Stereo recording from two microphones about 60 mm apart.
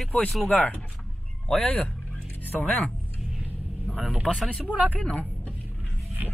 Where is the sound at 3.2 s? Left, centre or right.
Centre.